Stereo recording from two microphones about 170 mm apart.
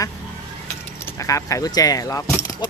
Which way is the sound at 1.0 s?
20° left (ahead or behind).